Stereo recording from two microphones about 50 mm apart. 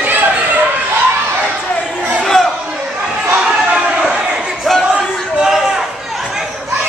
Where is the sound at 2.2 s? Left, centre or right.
Centre.